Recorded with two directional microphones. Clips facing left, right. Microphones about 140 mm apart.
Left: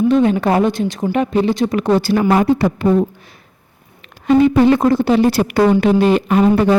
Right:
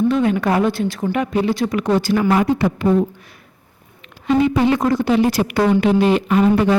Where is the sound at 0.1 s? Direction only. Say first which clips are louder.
Left 3 dB; 25° left (ahead or behind).